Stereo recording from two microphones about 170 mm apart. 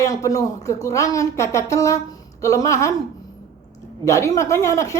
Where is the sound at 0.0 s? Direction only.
20° left (ahead or behind).